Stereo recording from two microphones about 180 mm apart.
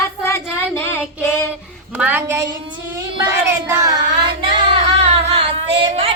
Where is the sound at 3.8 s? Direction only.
25° right (ahead or behind).